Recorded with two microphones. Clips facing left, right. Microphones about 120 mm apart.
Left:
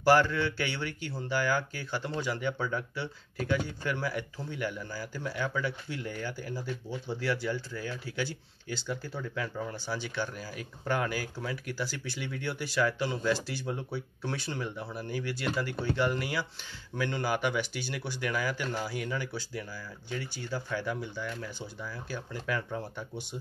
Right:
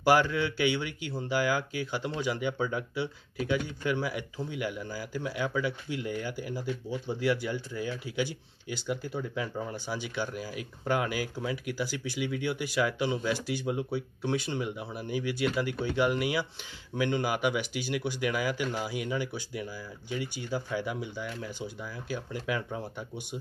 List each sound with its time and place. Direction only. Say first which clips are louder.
0.0 s speech: even; 15° right (ahead or behind)